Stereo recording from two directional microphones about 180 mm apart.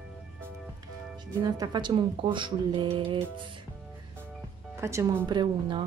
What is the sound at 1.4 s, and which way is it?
Speech, 25° right (ahead or behind).